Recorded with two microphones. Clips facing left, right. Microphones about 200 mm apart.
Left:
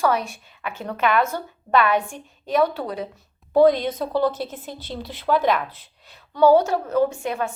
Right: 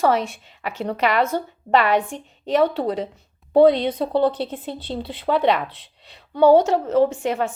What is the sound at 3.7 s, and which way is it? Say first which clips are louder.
Speech: right 2 dB; 65° right (ahead or behind).